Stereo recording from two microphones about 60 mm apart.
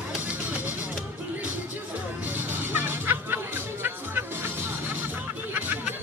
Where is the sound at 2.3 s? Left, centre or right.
Right.